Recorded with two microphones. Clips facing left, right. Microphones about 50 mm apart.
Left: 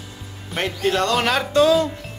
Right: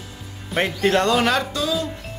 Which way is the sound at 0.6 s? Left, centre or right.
Centre.